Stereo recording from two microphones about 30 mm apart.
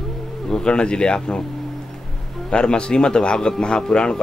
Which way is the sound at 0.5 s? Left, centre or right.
Left.